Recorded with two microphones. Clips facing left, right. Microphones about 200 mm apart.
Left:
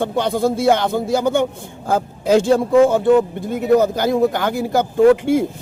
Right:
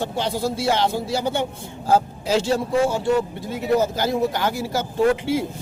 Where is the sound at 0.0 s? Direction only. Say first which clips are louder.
Left 6 dB; 55° left (ahead or behind).